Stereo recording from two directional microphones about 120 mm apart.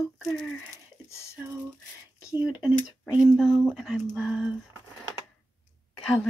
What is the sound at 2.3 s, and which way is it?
Speech, 10° right (ahead or behind).